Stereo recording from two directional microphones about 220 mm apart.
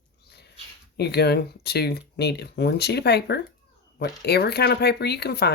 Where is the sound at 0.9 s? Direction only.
50° left (ahead or behind).